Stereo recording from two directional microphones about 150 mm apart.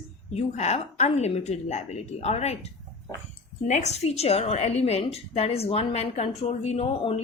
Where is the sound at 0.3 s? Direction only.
45° left (ahead or behind).